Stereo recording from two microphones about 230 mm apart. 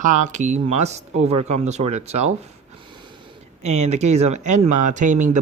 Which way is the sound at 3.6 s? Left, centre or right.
Right.